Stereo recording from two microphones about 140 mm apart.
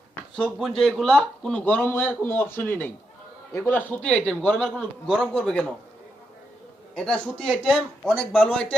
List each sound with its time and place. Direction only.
0.1 s a sound: 5° left (ahead or behind)
0.8 s a man's voice: centre (ahead or behind)
6.9 s a man's voice: 5° left (ahead or behind)
8.4 s speech: 10° left (ahead or behind)